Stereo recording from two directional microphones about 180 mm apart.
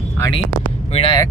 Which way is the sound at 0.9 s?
30° left (ahead or behind).